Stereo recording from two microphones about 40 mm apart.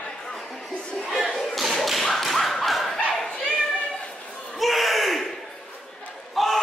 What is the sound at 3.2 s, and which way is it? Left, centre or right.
Bow-wow, left.